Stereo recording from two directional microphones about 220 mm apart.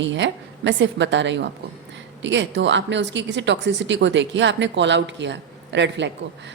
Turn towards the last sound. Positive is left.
turn(degrees=-55)  # may be behind; listen again after turning